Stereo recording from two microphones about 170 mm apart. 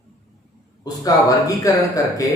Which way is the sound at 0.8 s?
20° left (ahead or behind).